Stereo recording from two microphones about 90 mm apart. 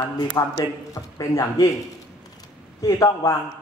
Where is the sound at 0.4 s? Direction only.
45° left (ahead or behind).